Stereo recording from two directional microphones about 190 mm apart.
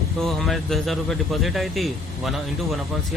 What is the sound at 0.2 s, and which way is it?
Speech, centre (ahead or behind).